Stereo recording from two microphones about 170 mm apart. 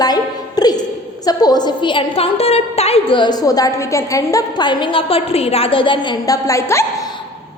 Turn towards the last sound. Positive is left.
turn(degrees=15)  # may be behind; listen again after turning